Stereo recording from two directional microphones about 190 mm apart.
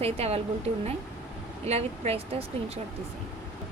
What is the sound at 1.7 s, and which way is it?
Speech, 35° right (ahead or behind).